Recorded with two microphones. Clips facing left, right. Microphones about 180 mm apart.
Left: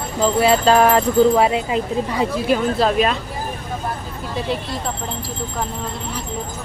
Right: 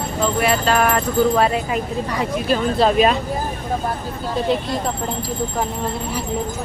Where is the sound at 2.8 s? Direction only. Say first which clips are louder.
Right 2 dB; centre (ahead or behind).